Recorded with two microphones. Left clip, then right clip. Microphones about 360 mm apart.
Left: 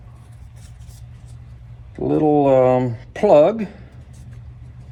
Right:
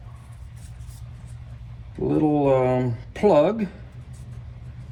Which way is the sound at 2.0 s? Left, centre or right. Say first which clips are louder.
Left 5 dB; left.